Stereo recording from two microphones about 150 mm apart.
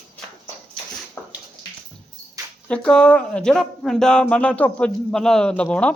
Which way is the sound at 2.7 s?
5° left (ahead or behind).